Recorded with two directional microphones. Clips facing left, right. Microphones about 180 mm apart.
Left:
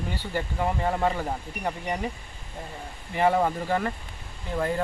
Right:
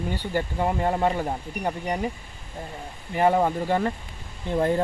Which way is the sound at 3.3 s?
15° right (ahead or behind).